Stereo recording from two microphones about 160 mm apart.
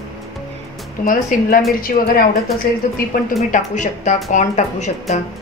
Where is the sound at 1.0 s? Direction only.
55° left (ahead or behind).